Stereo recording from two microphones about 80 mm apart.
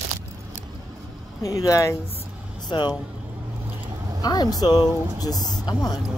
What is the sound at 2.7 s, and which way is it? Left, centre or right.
Speech, left.